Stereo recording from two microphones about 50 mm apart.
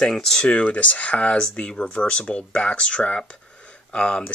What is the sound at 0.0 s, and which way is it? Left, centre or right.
Speech, centre.